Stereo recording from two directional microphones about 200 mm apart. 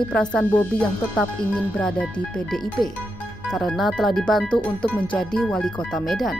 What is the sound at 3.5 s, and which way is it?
Speech, centre (ahead or behind).